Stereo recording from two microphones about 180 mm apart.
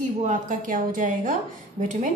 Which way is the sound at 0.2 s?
45° right (ahead or behind).